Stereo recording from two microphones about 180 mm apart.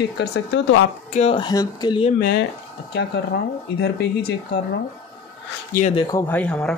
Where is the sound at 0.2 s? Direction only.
90° left.